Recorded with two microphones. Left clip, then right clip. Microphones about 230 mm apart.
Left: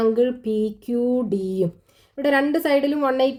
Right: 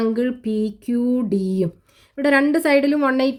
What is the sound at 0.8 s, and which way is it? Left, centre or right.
A woman's voice, right.